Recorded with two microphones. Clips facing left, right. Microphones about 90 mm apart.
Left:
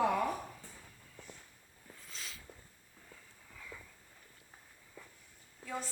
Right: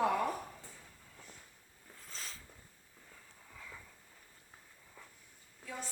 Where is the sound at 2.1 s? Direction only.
40° right (ahead or behind).